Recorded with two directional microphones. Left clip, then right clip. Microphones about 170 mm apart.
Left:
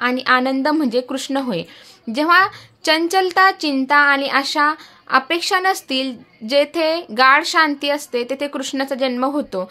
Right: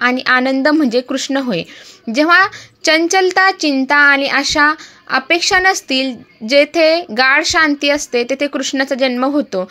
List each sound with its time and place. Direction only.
0.0 s speech: 20° right (ahead or behind)